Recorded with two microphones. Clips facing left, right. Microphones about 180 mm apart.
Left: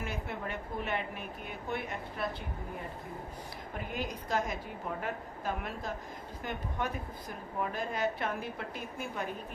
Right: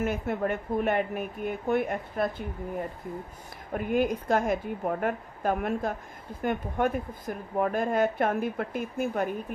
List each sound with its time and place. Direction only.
0.0 s a woman's voice: 50° right (ahead or behind)
3.7 s a woman's voice: 55° right (ahead or behind)